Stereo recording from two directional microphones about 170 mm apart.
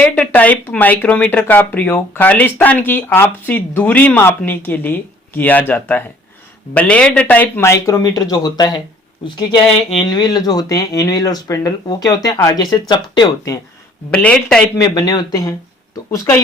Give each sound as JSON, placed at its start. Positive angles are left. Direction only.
{"t": 0.0, "sound": "speech", "side_deg": 10}
{"t": 14.1, "sound": "speech", "side_deg": 5}
{"t": 14.8, "sound": "speech", "side_deg": 25}